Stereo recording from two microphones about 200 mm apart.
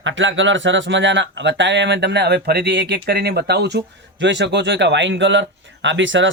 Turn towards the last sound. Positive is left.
turn(degrees=-70)  # may be behind; listen again after turning